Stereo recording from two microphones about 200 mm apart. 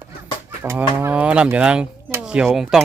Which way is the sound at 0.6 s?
10° right (ahead or behind).